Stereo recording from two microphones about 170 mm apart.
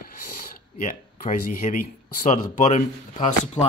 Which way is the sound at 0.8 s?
50° left (ahead or behind).